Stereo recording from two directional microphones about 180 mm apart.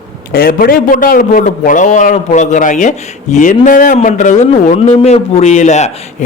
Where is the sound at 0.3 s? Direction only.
55° left (ahead or behind).